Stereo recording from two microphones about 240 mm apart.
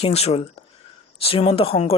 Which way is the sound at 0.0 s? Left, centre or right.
Left.